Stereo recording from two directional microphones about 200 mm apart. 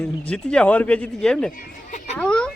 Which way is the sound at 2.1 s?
5° left (ahead or behind).